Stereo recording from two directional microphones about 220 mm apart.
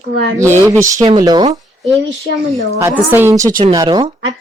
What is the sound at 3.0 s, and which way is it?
Speech, 10° right (ahead or behind).